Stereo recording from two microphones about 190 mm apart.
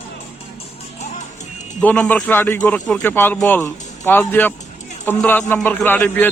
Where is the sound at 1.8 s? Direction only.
10° left (ahead or behind).